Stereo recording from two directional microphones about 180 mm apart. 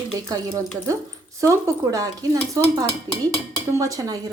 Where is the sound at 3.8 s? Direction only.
20° right (ahead or behind).